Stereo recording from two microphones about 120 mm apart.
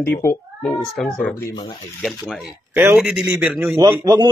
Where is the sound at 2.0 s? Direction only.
Centre (ahead or behind).